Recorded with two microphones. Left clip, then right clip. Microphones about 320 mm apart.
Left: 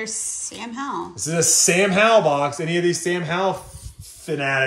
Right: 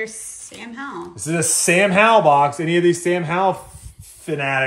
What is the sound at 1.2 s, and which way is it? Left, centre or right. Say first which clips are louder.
Speech: left 2 dB; right.